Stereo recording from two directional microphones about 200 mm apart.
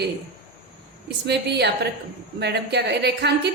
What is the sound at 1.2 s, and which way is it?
Speech, 55° right (ahead or behind).